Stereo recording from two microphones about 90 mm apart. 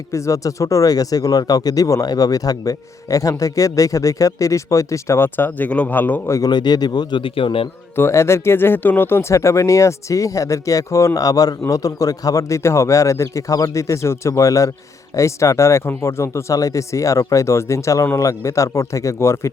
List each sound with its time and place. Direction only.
0.1 s speech: 35° left (ahead or behind); by 6.3 s 20° left (ahead or behind)
6.3 s a man's voice: 50° left (ahead or behind); by 7.7 s 85° left
7.9 s speech: 30° left (ahead or behind)